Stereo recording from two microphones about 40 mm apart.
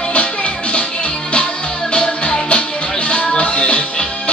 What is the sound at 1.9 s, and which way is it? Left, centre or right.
Music, left.